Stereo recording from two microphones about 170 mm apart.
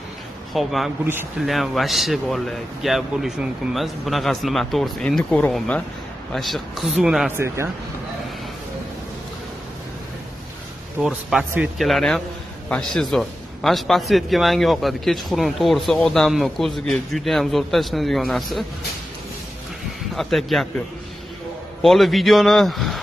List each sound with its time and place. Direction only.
0.5 s a man's voice: centre (ahead or behind)
7.3 s speech: 15° right (ahead or behind)
11.0 s a man's voice: 5° right (ahead or behind)
20.2 s a man's voice: centre (ahead or behind)
21.8 s a man's voice: centre (ahead or behind)